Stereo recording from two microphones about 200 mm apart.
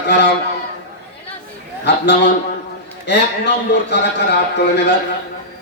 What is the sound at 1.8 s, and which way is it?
A man's voice, 60° left (ahead or behind).